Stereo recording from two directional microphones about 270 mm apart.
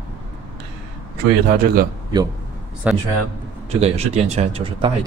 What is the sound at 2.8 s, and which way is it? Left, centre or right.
Speech, centre.